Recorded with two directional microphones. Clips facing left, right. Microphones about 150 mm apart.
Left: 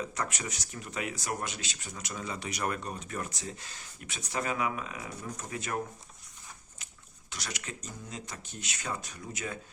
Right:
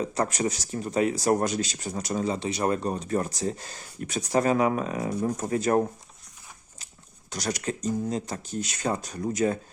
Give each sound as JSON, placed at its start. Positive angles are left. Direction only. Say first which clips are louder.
{"t": 0.0, "sound": "speech", "louder": "right 9 dB", "side_deg": -35}
{"t": 7.3, "sound": "speech", "louder": "right 12 dB", "side_deg": -40}